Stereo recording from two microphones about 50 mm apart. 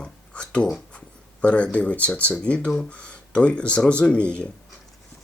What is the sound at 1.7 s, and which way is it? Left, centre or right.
Speech, left.